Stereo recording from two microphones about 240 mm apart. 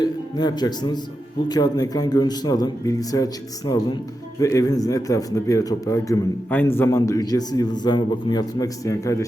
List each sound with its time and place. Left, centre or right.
0.0 s a man's voice: centre